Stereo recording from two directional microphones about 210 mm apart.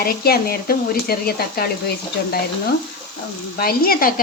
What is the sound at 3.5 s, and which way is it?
Speech, 45° left (ahead or behind).